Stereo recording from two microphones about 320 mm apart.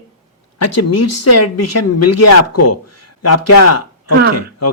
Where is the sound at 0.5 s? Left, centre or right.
Left.